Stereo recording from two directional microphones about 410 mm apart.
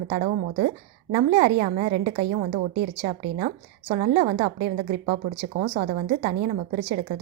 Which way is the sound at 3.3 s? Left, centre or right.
Centre.